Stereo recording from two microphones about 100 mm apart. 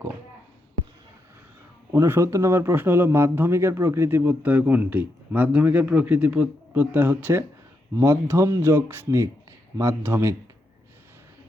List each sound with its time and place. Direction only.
1.9 s speech: 25° right (ahead or behind)